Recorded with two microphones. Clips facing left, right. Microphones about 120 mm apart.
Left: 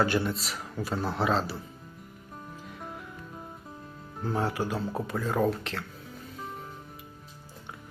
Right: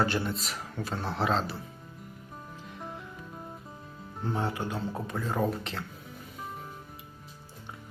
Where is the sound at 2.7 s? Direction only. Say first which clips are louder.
Right 2 dB; centre (ahead or behind).